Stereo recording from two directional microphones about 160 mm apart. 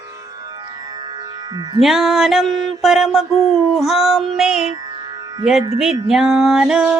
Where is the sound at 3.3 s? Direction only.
45° left (ahead or behind).